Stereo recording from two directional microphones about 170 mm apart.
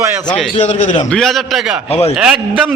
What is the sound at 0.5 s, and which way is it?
Speech, 40° left (ahead or behind).